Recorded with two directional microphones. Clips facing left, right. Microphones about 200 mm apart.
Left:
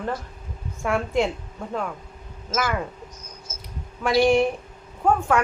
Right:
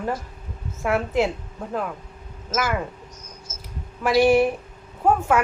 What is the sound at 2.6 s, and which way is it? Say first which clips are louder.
Speech: right 1 dB; 5° right (ahead or behind).